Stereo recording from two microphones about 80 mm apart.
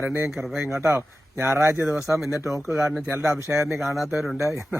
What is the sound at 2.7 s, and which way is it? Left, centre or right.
Speech, centre.